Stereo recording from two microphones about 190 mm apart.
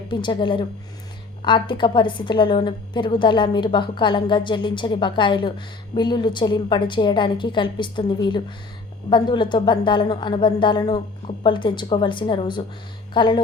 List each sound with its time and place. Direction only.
0.1 s a woman's voice: 25° left (ahead or behind)